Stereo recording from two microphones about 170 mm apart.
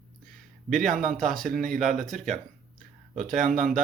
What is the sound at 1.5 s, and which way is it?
Speech, 50° right (ahead or behind).